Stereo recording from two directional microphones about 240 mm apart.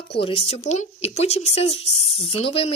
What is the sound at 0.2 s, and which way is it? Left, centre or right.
Speech, left.